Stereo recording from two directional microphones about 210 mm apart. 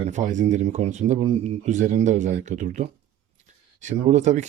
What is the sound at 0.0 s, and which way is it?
Speech, 35° right (ahead or behind).